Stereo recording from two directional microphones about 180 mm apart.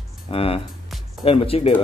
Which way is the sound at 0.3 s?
30° left (ahead or behind).